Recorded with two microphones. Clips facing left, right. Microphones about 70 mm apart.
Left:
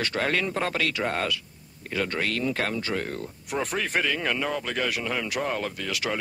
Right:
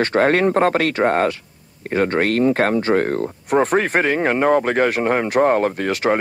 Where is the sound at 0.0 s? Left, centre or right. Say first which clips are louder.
Right 11 dB; right.